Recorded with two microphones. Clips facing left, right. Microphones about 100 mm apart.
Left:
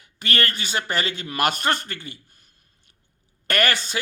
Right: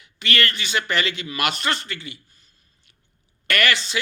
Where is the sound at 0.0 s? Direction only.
40° left (ahead or behind).